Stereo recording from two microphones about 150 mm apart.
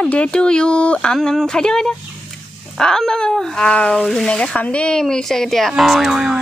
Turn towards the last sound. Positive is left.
turn(degrees=0)  # may be behind; listen again after turning